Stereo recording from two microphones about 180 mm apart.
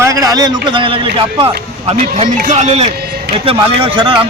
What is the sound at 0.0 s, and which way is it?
A man's voice, 20° right (ahead or behind).